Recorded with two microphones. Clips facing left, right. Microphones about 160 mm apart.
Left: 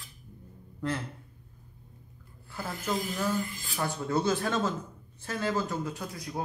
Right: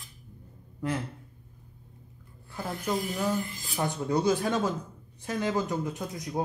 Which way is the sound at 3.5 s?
20° right (ahead or behind).